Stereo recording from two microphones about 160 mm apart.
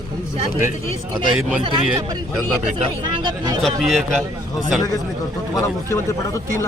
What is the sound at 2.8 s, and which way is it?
Speech, 30° right (ahead or behind).